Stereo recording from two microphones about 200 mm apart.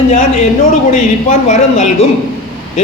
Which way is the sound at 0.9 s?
40° left (ahead or behind).